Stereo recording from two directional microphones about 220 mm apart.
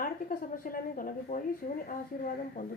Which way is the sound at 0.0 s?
40° left (ahead or behind).